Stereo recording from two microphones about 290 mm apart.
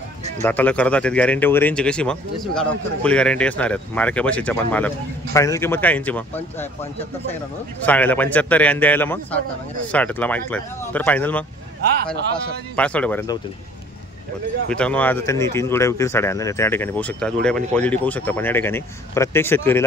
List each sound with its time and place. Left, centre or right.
0.4 s speech: centre
7.8 s speech: centre
12.7 s speech: centre
14.7 s a man's voice: centre